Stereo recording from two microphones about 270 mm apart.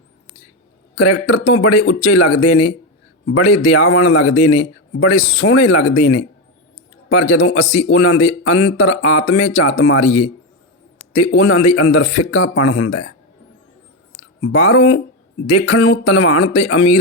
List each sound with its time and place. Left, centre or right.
0.9 s speech: left
11.1 s speech: left
14.4 s speech: left